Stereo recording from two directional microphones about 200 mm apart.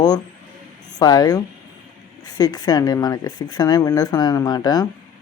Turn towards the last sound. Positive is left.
turn(degrees=20)  # may be behind; listen again after turning